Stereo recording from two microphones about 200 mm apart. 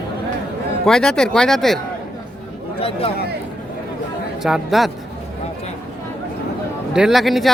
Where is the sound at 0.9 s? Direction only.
5° left (ahead or behind).